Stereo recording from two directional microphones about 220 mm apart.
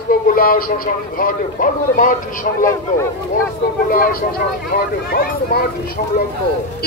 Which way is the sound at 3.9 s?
40° left (ahead or behind).